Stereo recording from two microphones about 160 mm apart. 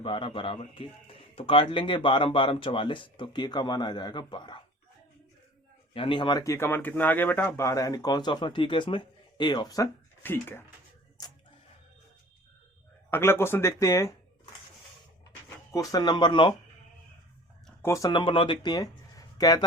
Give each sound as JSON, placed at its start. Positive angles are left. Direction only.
{"t": 0.0, "sound": "speech", "side_deg": 30}
{"t": 5.9, "sound": "speech", "side_deg": 30}
{"t": 11.2, "sound": "a sound", "side_deg": 25}
{"t": 13.1, "sound": "speech", "side_deg": 15}
{"t": 15.4, "sound": "speech", "side_deg": 20}
{"t": 17.8, "sound": "speech", "side_deg": 20}